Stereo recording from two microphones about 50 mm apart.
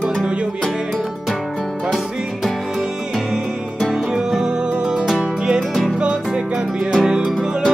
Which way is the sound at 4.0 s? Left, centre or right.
Centre.